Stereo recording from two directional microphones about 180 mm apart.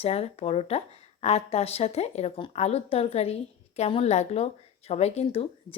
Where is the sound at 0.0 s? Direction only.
35° left (ahead or behind).